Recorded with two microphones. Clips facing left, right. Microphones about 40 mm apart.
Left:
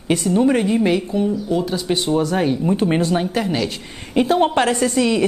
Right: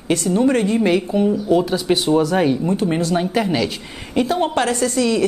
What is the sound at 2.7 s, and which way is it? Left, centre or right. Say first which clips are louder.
Speech: left 1 dB; left.